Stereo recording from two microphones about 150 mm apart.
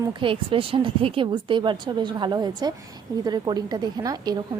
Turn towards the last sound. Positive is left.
turn(degrees=-25)  # may be behind; listen again after turning